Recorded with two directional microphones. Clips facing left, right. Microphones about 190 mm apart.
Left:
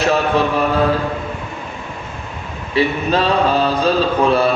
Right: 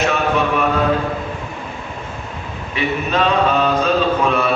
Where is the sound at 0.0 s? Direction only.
35° left (ahead or behind).